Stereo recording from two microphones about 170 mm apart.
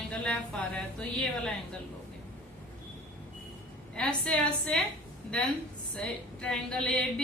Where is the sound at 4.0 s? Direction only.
5° left (ahead or behind).